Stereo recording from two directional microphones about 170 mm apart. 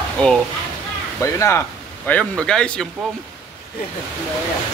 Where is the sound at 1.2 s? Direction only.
15° left (ahead or behind).